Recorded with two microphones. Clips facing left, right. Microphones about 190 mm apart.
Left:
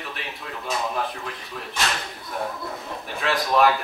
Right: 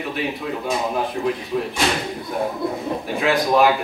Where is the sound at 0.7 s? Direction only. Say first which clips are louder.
Right 3 dB; 25° right (ahead or behind).